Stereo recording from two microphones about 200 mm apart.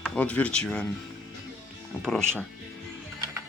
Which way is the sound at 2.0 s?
5° left (ahead or behind).